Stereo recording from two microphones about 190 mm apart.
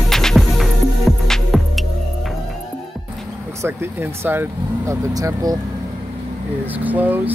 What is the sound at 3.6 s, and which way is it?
Speech, 10° right (ahead or behind).